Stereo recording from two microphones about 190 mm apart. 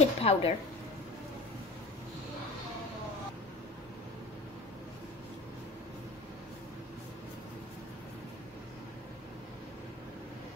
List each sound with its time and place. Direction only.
0.0 s a woman's voice: 30° left (ahead or behind)